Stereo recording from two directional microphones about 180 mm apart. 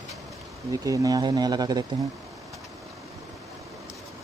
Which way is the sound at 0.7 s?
20° right (ahead or behind).